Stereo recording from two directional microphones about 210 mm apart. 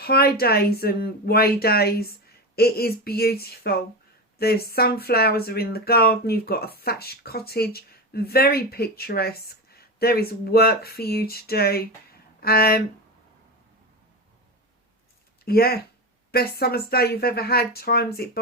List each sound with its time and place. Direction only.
0.0 s speech: 45° left (ahead or behind)
15.4 s speech: 45° left (ahead or behind)